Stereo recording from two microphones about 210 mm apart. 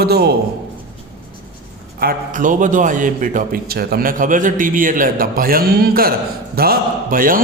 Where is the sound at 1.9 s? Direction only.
40° right (ahead or behind).